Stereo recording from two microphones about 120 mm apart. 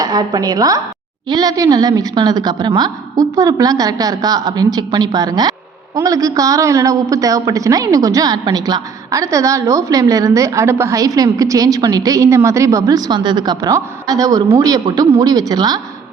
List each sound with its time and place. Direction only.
0.0 s a woman's voice: 35° right (ahead or behind)